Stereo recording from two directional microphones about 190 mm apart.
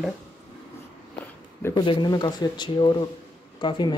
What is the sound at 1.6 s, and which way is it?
Speech, 15° left (ahead or behind).